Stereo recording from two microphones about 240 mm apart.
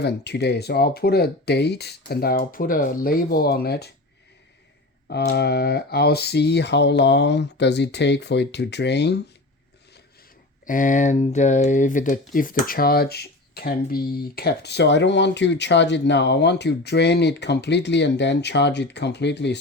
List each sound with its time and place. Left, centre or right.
0.0 s speech: left
5.0 s speech: left
10.7 s speech: left